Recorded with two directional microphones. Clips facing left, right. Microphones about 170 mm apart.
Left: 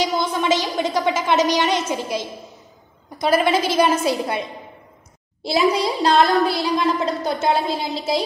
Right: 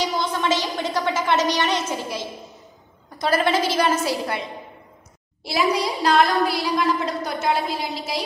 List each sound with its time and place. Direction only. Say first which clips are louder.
0.4 s a woman's voice: left 4 dB; 15° left (ahead or behind)
5.4 s speech: left 3 dB; 25° left (ahead or behind)